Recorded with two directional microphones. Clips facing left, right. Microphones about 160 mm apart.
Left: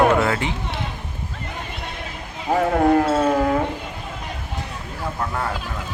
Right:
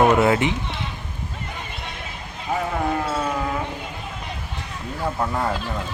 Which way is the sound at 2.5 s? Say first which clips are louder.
Left 8 dB; 55° left (ahead or behind).